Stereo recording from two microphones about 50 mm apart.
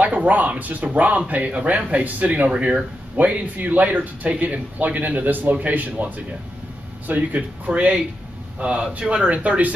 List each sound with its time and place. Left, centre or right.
0.0 s speech: right